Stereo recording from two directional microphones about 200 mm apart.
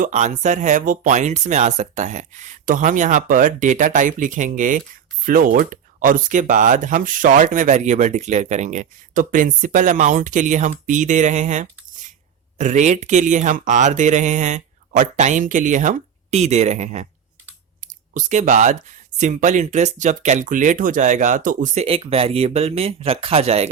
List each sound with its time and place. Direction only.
0.0 s speech: 35° right (ahead or behind)